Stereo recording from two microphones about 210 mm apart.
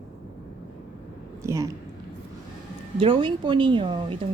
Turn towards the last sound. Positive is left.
turn(degrees=-25)  # may be behind; listen again after turning